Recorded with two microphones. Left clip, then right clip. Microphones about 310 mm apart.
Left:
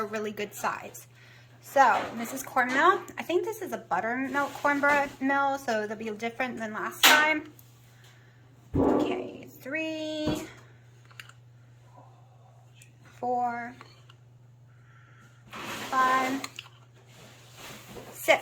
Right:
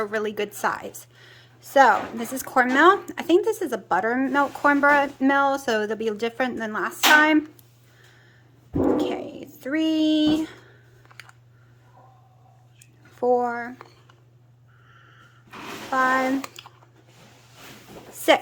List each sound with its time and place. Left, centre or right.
0.0 s a woman's voice: centre
9.0 s speech: centre
13.2 s speech: centre
15.4 s a sound: centre